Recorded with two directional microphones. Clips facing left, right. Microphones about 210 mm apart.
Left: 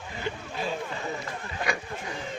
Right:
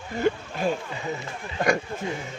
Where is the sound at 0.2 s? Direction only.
50° right (ahead or behind).